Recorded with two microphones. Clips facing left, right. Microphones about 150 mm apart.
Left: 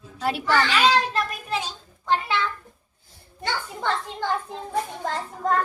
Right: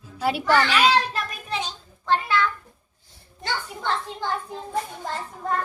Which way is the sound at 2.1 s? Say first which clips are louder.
Right 2 dB; 20° left (ahead or behind).